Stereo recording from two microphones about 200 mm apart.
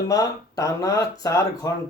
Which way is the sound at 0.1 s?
15° left (ahead or behind).